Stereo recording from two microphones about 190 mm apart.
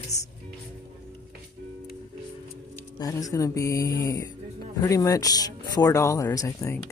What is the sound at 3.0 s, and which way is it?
Speech, 20° left (ahead or behind).